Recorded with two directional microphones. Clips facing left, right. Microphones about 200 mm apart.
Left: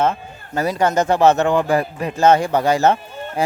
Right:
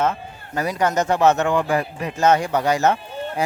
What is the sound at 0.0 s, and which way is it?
A man's voice, 30° left (ahead or behind).